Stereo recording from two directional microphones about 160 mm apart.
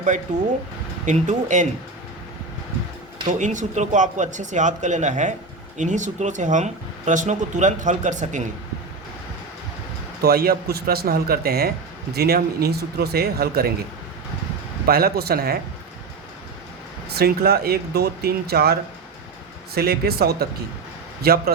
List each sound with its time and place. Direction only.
0.3 s speech: 50° right (ahead or behind)
3.2 s speech: 50° right (ahead or behind)
10.2 s speech: 70° right (ahead or behind)
14.8 s speech: 70° right (ahead or behind)
17.1 s speech: 80° right